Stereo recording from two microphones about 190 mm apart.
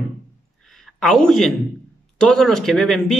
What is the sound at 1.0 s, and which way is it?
Speech, 5° left (ahead or behind).